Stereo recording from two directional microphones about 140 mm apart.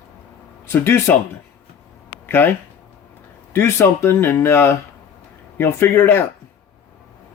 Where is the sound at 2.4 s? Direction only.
15° left (ahead or behind).